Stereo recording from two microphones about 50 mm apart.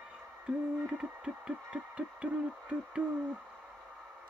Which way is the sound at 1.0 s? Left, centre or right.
Centre.